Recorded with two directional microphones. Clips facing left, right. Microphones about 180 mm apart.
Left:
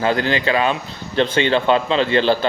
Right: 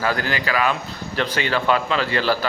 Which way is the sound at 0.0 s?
25° left (ahead or behind).